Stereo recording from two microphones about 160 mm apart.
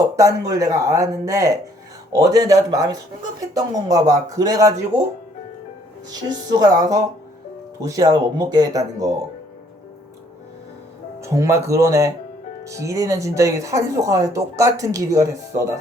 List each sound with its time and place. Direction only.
0.2 s speech: 20° right (ahead or behind)
6.2 s speech: 25° right (ahead or behind)
11.2 s speech: 20° right (ahead or behind)